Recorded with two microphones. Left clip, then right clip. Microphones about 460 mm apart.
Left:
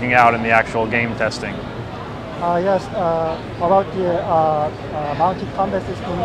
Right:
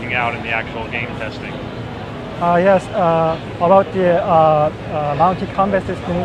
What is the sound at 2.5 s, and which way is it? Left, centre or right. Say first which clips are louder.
Speech: right 5 dB; right.